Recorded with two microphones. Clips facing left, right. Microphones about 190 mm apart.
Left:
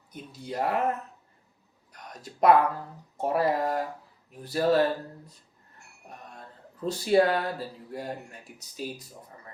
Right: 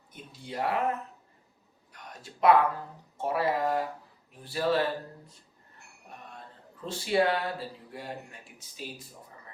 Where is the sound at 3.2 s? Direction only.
40° left (ahead or behind).